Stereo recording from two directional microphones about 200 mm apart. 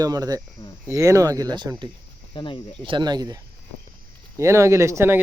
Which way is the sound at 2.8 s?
20° right (ahead or behind).